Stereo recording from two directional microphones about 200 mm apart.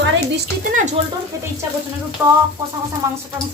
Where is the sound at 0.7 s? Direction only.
40° right (ahead or behind).